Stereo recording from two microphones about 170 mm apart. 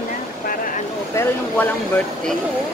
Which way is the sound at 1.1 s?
15° left (ahead or behind).